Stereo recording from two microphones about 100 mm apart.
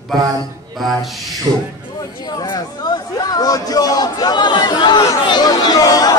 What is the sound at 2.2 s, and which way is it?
A man's voice, 45° left (ahead or behind).